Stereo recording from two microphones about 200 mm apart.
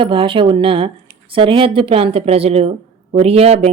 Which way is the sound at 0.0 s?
25° right (ahead or behind).